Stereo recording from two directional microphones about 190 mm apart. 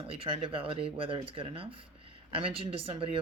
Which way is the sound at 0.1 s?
30° right (ahead or behind).